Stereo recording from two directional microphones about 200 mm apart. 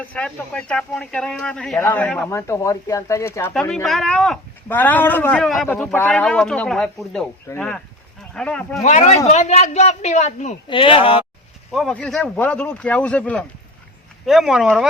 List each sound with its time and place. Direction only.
0.0 s speech: 5° left (ahead or behind)
7.5 s speech: 15° left (ahead or behind)
8.4 s speech: 5° left (ahead or behind)
8.8 s speech: 35° left (ahead or behind)
11.7 s speech: centre (ahead or behind)